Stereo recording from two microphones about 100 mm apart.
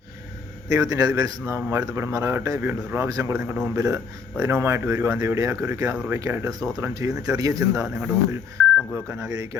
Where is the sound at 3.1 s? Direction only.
35° right (ahead or behind).